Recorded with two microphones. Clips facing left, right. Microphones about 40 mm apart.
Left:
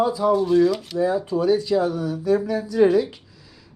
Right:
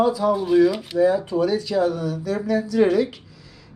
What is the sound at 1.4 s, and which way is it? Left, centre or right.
Speech, centre.